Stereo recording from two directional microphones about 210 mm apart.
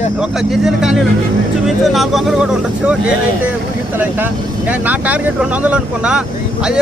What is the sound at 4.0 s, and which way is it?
Speech, 10° right (ahead or behind).